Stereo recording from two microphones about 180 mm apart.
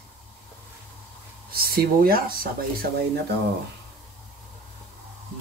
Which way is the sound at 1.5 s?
55° right (ahead or behind).